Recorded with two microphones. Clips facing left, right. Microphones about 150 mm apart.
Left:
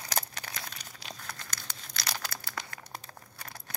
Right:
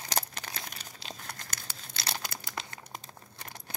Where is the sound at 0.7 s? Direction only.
30° right (ahead or behind).